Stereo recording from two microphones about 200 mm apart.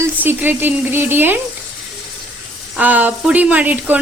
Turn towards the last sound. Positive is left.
turn(degrees=-10)  # may be behind; listen again after turning